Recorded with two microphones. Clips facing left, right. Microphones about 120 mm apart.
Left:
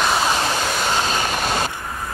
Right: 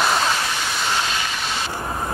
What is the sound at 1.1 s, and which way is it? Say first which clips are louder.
Vehicle: left 5 dB; 45° left (ahead or behind).